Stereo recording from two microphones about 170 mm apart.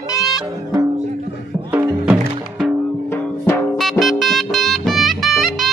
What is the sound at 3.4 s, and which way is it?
Music, 15° left (ahead or behind).